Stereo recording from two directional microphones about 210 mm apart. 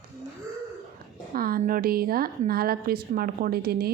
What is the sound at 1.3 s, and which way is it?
A woman's voice, 45° right (ahead or behind).